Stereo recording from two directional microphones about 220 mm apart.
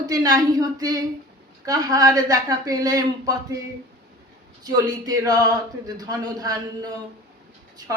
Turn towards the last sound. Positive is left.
turn(degrees=-15)  # may be behind; listen again after turning